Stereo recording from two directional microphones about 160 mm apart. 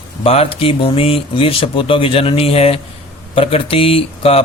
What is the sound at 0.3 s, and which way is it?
Speech, 40° left (ahead or behind).